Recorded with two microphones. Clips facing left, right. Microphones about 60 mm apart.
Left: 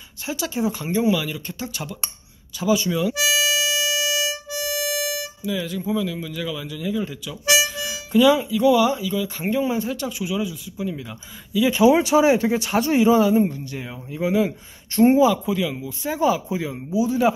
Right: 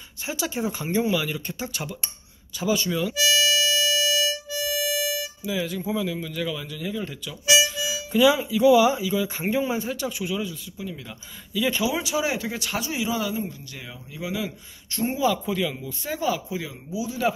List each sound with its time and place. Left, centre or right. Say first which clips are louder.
0.3 s speech: left 3 dB; centre
11.8 s speech: left 10 dB; left
12.8 s speech: left 13 dB; left
13.7 s speech: left 8 dB; left
15.2 s speech: left 4 dB; centre
16.2 s speech: left 6 dB; left